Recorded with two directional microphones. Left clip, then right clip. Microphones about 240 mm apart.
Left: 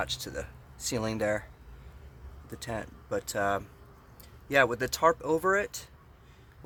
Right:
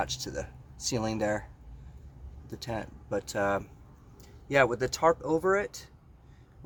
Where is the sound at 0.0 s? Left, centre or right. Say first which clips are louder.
Right 1 dB; centre.